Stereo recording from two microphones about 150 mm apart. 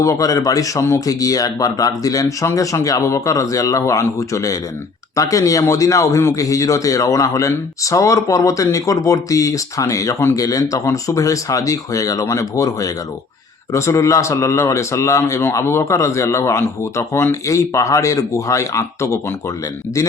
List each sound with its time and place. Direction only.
0.0 s a man's voice: 20° left (ahead or behind)